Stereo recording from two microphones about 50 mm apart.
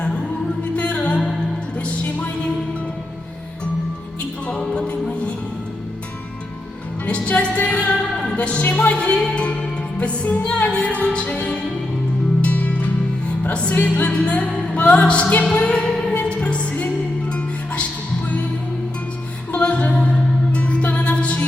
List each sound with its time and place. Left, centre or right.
0.8 s music: left
4.7 s music: left
7.0 s music: left
19.5 s music: left